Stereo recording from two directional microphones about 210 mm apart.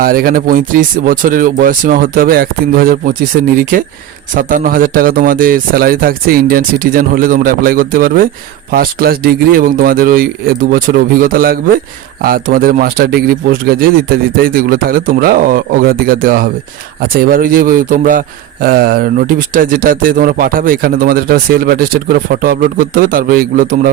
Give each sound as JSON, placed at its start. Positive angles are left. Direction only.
{"t": 0.0, "sound": "speech", "side_deg": -45}